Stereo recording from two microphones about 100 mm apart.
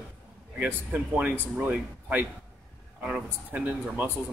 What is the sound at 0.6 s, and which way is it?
Speech, 15° right (ahead or behind).